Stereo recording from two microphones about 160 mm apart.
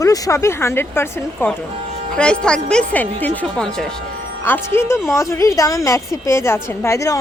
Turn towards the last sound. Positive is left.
turn(degrees=20)  # may be behind; listen again after turning